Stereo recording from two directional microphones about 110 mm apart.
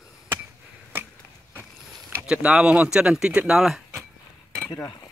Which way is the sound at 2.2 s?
10° right (ahead or behind).